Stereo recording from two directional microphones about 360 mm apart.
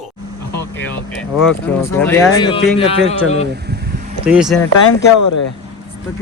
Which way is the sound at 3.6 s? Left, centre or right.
Right.